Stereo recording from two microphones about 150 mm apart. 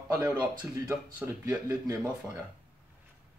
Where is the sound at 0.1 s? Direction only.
10° right (ahead or behind).